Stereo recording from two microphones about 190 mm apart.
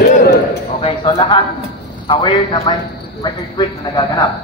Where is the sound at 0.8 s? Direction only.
25° left (ahead or behind).